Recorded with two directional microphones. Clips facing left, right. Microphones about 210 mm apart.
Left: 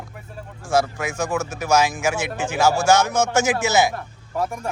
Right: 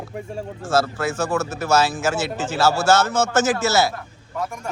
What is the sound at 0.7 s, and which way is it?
Speech, 15° left (ahead or behind).